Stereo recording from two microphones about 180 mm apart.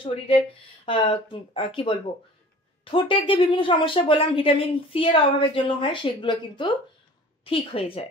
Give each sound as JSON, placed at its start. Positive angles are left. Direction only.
{"t": 0.0, "sound": "a woman's voice", "side_deg": 30}